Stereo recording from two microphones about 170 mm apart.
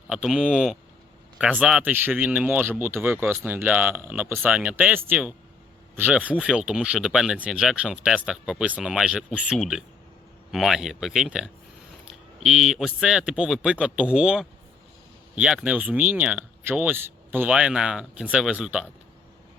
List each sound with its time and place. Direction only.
0.1 s a man's voice: 5° right (ahead or behind)